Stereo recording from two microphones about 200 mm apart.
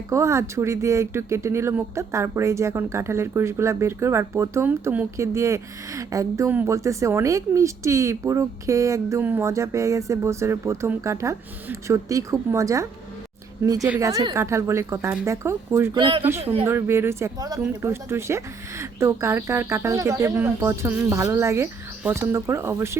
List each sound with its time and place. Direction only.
0.1 s speech: 15° right (ahead or behind)
16.0 s speech: 25° right (ahead or behind)
16.6 s speech: 15° right (ahead or behind)